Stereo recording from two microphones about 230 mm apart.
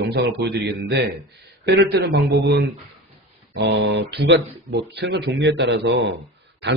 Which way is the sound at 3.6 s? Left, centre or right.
Right.